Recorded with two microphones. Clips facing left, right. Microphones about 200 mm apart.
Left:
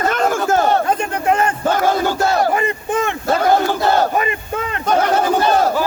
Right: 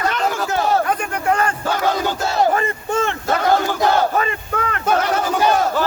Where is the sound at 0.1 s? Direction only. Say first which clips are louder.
Left 4 dB; 45° left (ahead or behind).